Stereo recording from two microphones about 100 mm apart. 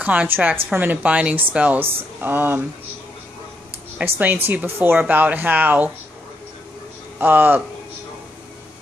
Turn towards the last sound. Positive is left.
turn(degrees=-20)  # may be behind; listen again after turning